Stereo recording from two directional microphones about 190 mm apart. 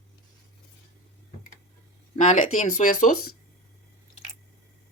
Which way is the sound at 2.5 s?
40° left (ahead or behind).